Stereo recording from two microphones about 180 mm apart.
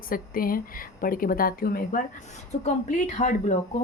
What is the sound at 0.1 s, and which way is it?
A woman's voice, 50° left (ahead or behind).